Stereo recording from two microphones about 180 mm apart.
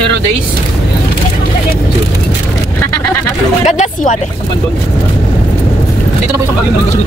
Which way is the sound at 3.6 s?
40° left (ahead or behind).